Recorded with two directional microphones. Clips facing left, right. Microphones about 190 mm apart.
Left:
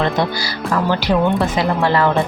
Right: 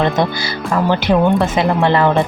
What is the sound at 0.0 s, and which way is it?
Speech, 20° right (ahead or behind).